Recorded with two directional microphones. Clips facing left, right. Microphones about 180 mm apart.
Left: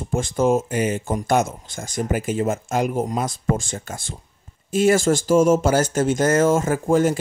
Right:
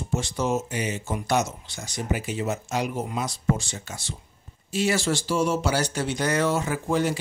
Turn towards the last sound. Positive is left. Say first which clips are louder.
# left 6 dB
turn(degrees=45)  # may be behind; listen again after turning